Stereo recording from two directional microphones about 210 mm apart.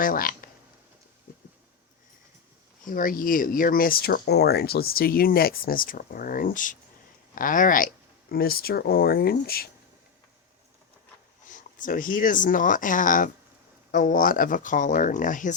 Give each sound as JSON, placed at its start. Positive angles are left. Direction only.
{"t": 0.0, "sound": "speech", "side_deg": 40}
{"t": 2.8, "sound": "speech", "side_deg": 40}
{"t": 11.5, "sound": "speech", "side_deg": 40}